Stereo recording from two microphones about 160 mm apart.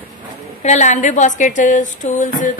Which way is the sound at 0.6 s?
50° left (ahead or behind).